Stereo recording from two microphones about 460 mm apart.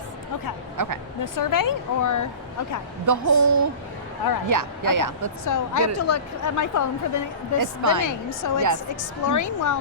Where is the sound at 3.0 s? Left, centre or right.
Right.